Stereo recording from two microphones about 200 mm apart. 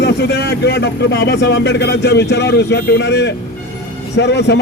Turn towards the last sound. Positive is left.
turn(degrees=60)  # may be behind; listen again after turning